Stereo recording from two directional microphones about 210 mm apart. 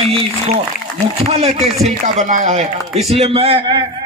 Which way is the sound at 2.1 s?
35° right (ahead or behind).